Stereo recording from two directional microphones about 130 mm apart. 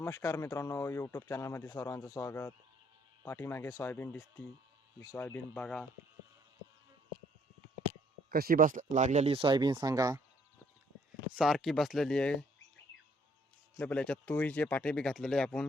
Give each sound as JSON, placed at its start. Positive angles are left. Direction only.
{"t": 0.0, "sound": "speech", "side_deg": 25}
{"t": 8.5, "sound": "speech", "side_deg": -90}
{"t": 9.3, "sound": "speech", "side_deg": -40}
{"t": 11.3, "sound": "speech", "side_deg": 0}
{"t": 13.7, "sound": "speech", "side_deg": 10}